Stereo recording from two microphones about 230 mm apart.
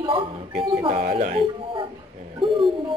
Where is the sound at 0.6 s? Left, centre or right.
Right.